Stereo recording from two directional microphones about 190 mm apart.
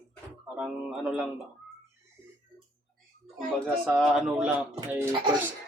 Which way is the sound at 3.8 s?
Centre (ahead or behind).